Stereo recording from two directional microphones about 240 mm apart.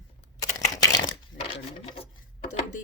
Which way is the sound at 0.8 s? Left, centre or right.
Centre.